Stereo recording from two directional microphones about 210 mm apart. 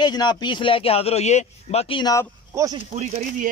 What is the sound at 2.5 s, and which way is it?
Speech, 15° right (ahead or behind).